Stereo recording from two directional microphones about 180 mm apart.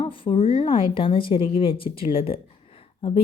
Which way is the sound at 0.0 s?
30° left (ahead or behind).